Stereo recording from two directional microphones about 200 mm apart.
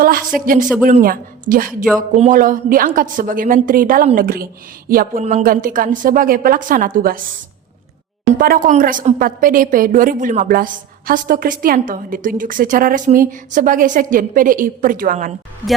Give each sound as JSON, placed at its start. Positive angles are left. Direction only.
{"t": 0.0, "sound": "a woman's voice", "side_deg": -45}
{"t": 8.3, "sound": "a woman's voice", "side_deg": -45}